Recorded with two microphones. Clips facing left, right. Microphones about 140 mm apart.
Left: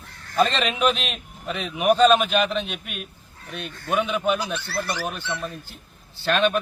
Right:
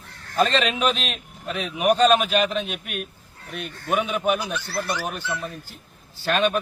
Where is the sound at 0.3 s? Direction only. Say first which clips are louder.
Even; centre (ahead or behind).